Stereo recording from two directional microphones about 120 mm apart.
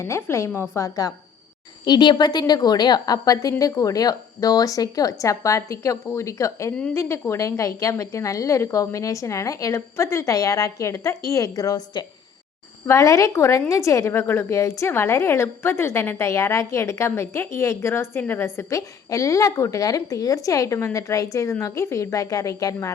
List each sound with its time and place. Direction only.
0.0 s a woman's voice: 20° left (ahead or behind)
1.8 s a woman's voice: 40° left (ahead or behind)